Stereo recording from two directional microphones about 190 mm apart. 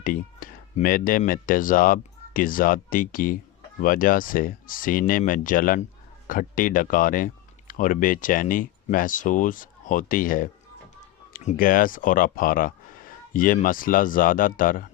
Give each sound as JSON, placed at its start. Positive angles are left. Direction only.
{"t": 0.0, "sound": "speech", "side_deg": 45}